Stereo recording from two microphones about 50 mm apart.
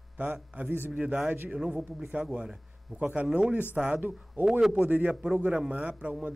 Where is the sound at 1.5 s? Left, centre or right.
Centre.